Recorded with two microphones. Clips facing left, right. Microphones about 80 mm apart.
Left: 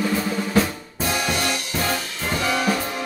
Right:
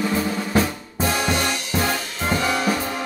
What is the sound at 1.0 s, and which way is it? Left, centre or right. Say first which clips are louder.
Music: right 2 dB; right.